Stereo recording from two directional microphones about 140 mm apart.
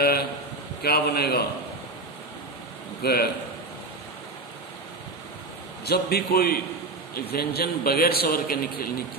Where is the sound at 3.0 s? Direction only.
90° left.